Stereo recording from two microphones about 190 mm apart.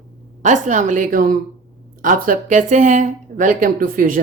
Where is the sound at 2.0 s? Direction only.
45° right (ahead or behind).